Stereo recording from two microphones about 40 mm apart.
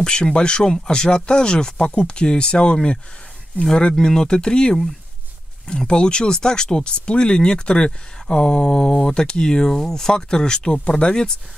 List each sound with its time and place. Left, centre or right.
0.0 s speech: centre
3.9 s speech: centre
10.1 s speech: centre